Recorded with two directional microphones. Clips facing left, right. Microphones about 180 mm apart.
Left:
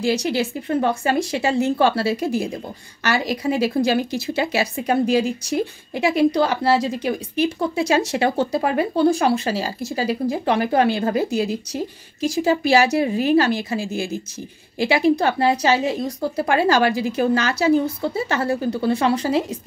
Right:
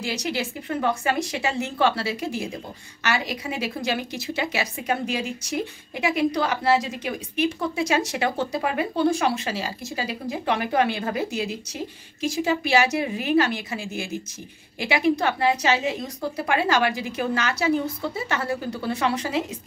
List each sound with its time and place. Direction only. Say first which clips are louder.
0.0 s speech: left 7 dB; 30° left (ahead or behind)